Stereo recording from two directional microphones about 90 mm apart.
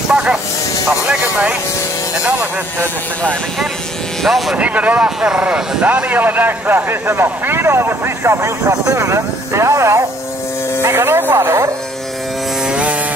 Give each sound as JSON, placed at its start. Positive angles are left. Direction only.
{"t": 0.1, "sound": "a sound", "side_deg": -10}
{"t": 0.8, "sound": "speech", "side_deg": -10}
{"t": 4.2, "sound": "speech", "side_deg": 0}
{"t": 4.6, "sound": "speech", "side_deg": -15}